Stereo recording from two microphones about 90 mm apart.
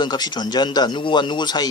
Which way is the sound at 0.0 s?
50° left (ahead or behind).